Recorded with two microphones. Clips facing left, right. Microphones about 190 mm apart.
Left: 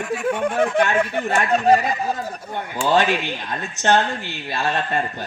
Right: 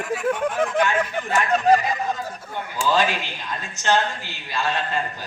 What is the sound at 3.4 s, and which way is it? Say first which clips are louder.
A man's voice: left 3 dB; 55° left (ahead or behind).